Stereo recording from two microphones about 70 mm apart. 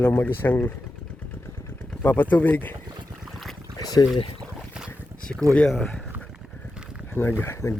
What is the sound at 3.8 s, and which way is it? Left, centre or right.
Speech, left.